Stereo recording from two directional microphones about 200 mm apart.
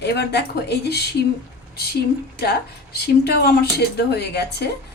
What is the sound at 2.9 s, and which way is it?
Speech, 55° left (ahead or behind).